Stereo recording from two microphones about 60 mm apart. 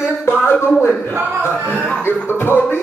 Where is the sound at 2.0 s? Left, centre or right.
Left.